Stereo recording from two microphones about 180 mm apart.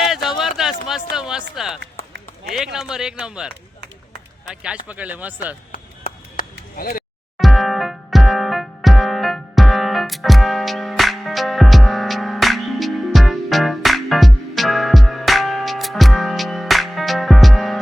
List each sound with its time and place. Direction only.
0.0 s a sound: centre (ahead or behind)
2.9 s speech: 5° right (ahead or behind)
4.6 s speech: 5° right (ahead or behind)
5.7 s a sound: 55° left (ahead or behind)
6.7 s speech: 55° left (ahead or behind)
7.3 s music: centre (ahead or behind)